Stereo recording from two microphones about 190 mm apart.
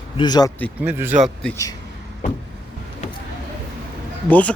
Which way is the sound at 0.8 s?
10° right (ahead or behind).